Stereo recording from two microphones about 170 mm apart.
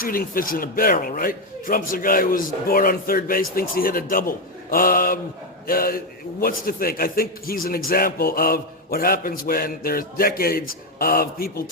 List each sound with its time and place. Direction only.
0.0 s a man's voice: 55° left (ahead or behind)